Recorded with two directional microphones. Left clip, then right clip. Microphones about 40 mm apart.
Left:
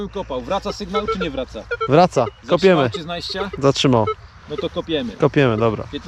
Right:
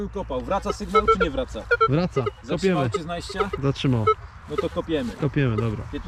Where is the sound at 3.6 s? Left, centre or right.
Right.